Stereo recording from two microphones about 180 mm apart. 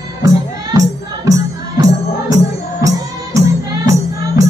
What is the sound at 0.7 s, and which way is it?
Music, 20° right (ahead or behind).